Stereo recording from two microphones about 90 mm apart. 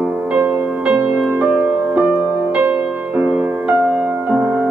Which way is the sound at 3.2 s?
15° right (ahead or behind).